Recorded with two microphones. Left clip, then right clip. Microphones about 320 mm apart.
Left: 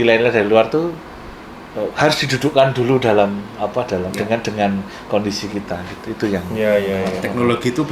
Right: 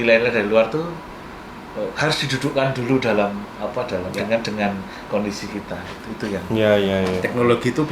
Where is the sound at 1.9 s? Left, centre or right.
Left.